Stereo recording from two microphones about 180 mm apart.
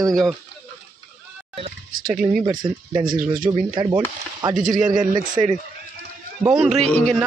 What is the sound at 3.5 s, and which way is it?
Speech, 25° right (ahead or behind).